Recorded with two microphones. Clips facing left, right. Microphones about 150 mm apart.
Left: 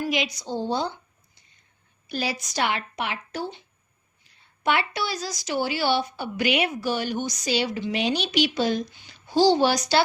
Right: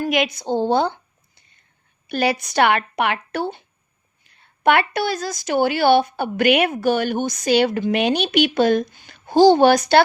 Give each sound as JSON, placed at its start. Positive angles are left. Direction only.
{"t": 0.0, "sound": "speech", "side_deg": -55}
{"t": 2.0, "sound": "speech", "side_deg": -60}